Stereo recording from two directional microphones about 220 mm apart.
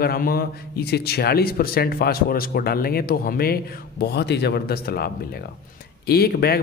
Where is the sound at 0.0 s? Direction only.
45° left (ahead or behind).